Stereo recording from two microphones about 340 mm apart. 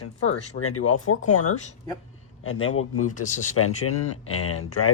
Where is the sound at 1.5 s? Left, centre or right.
Centre.